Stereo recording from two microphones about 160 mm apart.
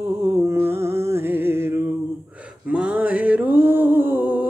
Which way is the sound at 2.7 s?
10° right (ahead or behind).